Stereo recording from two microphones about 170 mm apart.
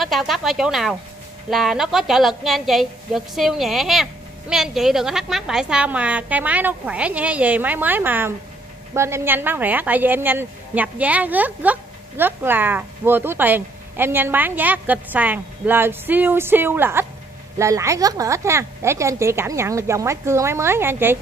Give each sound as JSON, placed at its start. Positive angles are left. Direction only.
{"t": 0.0, "sound": "a woman's voice", "side_deg": 0}